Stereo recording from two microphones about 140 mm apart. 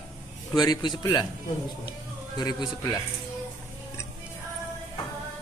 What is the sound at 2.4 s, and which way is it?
Speech, 30° left (ahead or behind).